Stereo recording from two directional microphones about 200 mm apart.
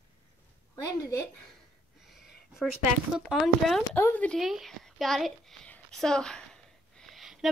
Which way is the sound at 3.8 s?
10° left (ahead or behind).